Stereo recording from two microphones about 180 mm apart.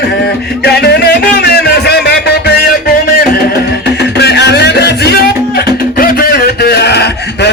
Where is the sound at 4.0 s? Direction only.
70° left (ahead or behind).